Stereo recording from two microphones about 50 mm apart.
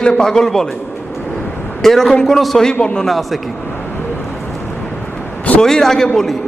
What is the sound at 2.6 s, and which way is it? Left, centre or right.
Speech, centre.